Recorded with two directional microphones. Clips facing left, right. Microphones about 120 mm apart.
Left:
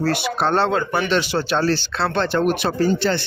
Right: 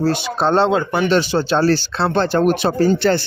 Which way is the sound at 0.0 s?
25° right (ahead or behind).